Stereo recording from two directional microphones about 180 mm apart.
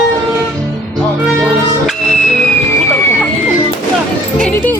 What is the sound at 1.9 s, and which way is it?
Music, centre (ahead or behind).